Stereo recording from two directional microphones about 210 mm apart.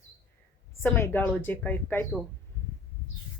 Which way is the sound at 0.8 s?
10° left (ahead or behind).